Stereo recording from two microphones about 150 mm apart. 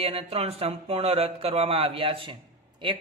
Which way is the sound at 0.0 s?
40° right (ahead or behind).